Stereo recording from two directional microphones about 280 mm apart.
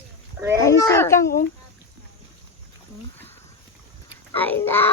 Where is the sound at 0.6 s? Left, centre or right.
Centre.